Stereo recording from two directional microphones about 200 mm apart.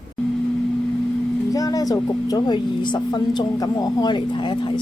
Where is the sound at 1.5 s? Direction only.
20° left (ahead or behind).